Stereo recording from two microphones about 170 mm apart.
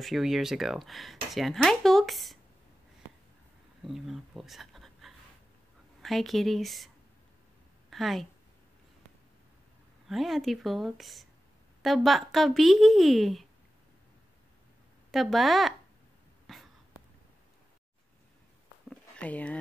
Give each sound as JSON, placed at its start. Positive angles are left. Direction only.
{"t": 0.0, "sound": "speech", "side_deg": 0}
{"t": 3.8, "sound": "speech", "side_deg": 0}
{"t": 7.9, "sound": "a woman's voice", "side_deg": 0}
{"t": 10.0, "sound": "speech", "side_deg": 0}
{"t": 15.0, "sound": "speech", "side_deg": 0}
{"t": 16.5, "sound": "a sound", "side_deg": 0}
{"t": 18.9, "sound": "a sound", "side_deg": 5}